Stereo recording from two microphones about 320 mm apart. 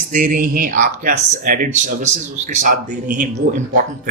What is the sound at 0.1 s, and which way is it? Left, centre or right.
Speech, right.